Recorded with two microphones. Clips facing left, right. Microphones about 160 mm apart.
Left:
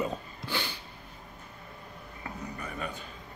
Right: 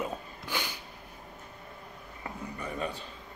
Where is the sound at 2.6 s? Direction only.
30° right (ahead or behind).